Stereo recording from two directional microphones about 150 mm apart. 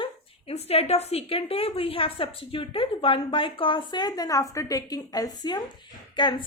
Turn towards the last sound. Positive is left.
turn(degrees=30)  # may be behind; listen again after turning